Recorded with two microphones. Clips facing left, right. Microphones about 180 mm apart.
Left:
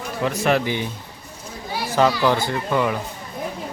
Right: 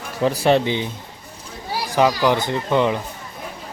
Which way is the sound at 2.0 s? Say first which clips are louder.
Right 1 dB; 15° right (ahead or behind).